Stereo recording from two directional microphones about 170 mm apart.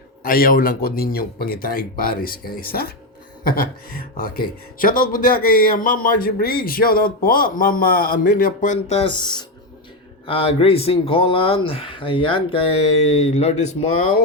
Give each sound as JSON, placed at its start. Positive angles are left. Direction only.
{"t": 0.2, "sound": "speech", "side_deg": 55}